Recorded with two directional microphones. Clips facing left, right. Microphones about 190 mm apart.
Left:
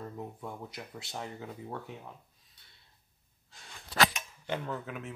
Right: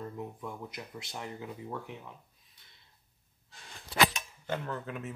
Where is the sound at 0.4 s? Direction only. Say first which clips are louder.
Right 1 dB; 30° left (ahead or behind).